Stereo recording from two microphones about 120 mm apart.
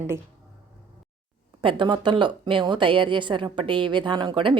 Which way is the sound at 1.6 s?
45° right (ahead or behind).